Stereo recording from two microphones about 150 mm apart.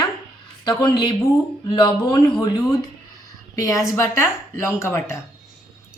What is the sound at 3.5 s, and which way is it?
A woman's voice, 20° left (ahead or behind).